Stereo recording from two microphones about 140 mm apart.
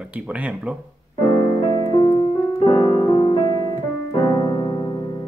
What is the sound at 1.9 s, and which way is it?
Music, 30° left (ahead or behind).